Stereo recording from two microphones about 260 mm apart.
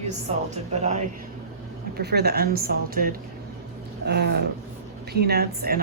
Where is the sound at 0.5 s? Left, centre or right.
Right.